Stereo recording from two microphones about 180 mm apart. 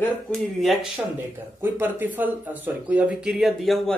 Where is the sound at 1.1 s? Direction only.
10° right (ahead or behind).